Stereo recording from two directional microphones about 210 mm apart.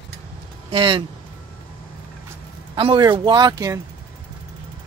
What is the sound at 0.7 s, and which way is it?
Speech, 25° right (ahead or behind).